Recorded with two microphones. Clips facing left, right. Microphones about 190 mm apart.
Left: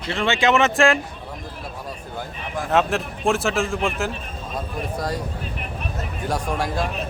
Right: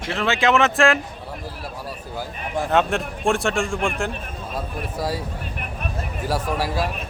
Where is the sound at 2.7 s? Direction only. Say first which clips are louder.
Left 1 dB; centre (ahead or behind).